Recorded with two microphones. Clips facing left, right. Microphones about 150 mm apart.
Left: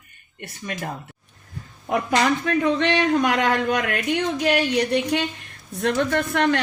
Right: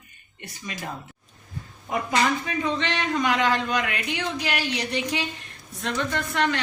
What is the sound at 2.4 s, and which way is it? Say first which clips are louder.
A woman's voice: left 6 dB; 60° left (ahead or behind).